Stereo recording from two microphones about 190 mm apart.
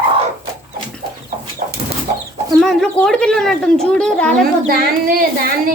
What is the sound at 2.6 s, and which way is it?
Speech, 5° left (ahead or behind).